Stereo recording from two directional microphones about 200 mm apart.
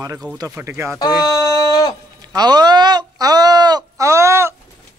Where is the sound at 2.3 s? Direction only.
20° right (ahead or behind).